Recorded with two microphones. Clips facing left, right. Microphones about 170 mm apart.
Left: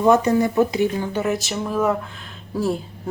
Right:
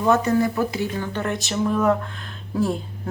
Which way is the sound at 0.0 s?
15° left (ahead or behind).